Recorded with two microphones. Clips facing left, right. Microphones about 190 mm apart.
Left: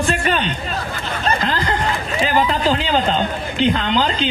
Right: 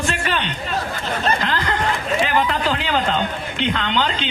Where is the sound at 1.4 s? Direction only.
35° left (ahead or behind).